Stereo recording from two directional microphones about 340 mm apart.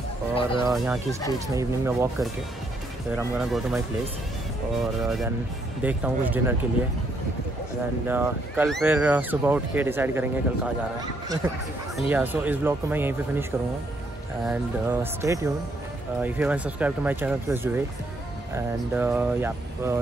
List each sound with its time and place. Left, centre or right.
0.3 s music: centre
0.7 s speech: centre
5.8 s speech: centre
8.1 s speech: centre
18.9 s speech: centre